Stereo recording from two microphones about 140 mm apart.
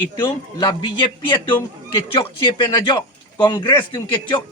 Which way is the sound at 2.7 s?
30° left (ahead or behind).